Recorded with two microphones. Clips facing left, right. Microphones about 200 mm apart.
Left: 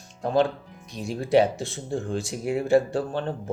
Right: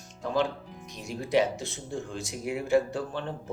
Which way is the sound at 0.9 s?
30° left (ahead or behind).